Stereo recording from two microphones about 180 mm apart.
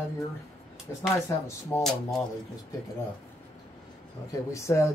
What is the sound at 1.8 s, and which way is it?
Speech, centre (ahead or behind).